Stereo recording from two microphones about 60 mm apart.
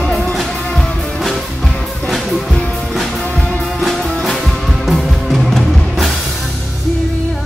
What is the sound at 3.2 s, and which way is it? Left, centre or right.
Music, centre.